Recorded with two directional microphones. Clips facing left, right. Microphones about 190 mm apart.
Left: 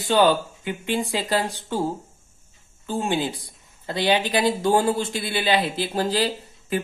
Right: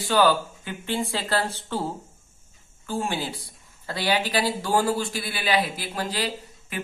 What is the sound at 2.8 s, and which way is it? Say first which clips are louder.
Speech: left 4 dB; 20° left (ahead or behind).